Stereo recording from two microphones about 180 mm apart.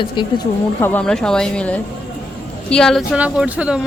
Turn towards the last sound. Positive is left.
turn(degrees=-5)  # may be behind; listen again after turning